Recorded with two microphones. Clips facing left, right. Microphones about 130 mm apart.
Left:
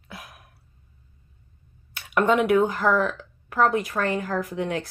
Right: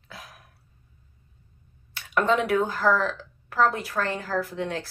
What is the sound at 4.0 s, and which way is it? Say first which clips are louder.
Speech: right 1 dB; 10° left (ahead or behind).